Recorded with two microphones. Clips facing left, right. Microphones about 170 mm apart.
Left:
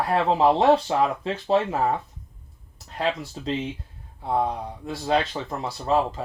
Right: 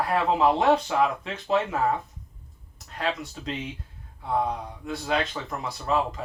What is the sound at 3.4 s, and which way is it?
Speech, 30° left (ahead or behind).